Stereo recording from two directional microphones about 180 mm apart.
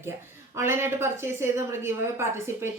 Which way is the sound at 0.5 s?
15° right (ahead or behind).